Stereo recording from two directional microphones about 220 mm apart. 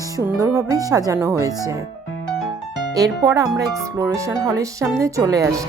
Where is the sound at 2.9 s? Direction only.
15° right (ahead or behind).